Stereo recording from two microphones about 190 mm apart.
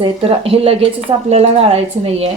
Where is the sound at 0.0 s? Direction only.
30° right (ahead or behind).